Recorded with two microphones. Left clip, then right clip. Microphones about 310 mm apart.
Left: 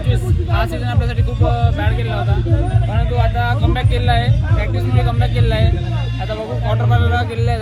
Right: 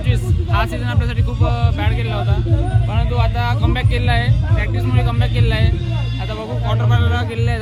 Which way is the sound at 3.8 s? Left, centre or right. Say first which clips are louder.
Left 2 dB; centre.